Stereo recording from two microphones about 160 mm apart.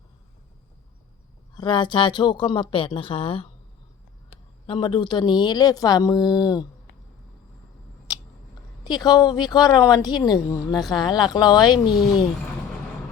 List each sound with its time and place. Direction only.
1.5 s speech: 30° left (ahead or behind)
4.6 s a woman's voice: 30° left (ahead or behind)
8.1 s scissors: 25° left (ahead or behind)
8.8 s a woman's voice: 25° left (ahead or behind)